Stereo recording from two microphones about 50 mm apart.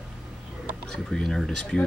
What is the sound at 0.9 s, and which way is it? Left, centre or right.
Speech, centre.